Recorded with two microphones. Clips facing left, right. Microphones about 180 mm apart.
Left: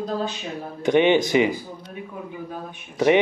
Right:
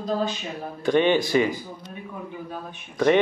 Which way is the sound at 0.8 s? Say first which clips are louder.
Left 2 dB; 20° left (ahead or behind).